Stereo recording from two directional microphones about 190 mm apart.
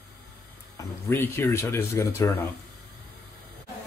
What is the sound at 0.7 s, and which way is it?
Speech, 10° left (ahead or behind).